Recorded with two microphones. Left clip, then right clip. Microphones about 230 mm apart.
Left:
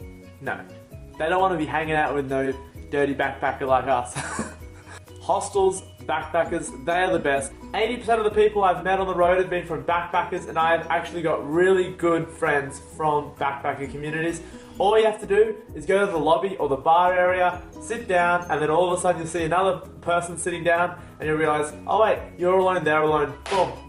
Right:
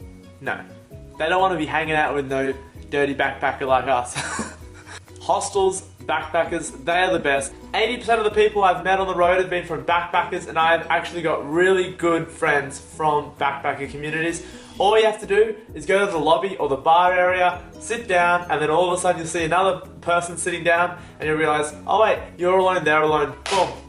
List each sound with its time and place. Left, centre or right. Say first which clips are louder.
1.2 s speech: right 2 dB; centre
5.7 s speech: right 3 dB; centre
16.6 s a man's voice: right 2 dB; left
16.8 s speech: right 2 dB; centre